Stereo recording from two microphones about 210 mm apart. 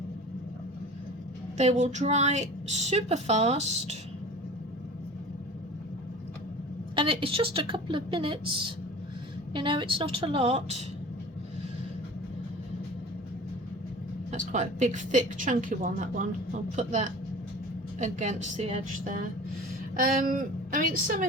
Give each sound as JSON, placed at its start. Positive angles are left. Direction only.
{"t": 1.5, "sound": "a woman's voice", "side_deg": -30}
{"t": 6.9, "sound": "a woman's voice", "side_deg": -25}
{"t": 14.3, "sound": "a woman's voice", "side_deg": -35}